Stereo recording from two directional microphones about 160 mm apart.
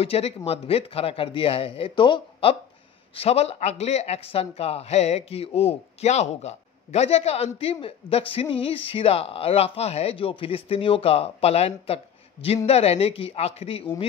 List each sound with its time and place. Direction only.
0.0 s speech: 40° left (ahead or behind)